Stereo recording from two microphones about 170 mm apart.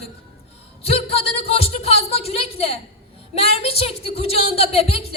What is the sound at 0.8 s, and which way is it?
A woman's voice, 35° left (ahead or behind).